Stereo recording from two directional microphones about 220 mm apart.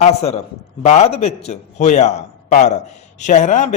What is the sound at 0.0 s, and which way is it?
A man's voice, 30° left (ahead or behind).